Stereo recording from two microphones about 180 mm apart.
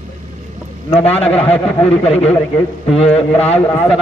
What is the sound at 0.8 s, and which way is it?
Speech, 35° left (ahead or behind).